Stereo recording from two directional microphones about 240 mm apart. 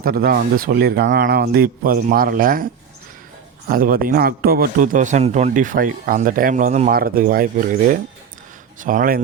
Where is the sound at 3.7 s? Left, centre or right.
Right.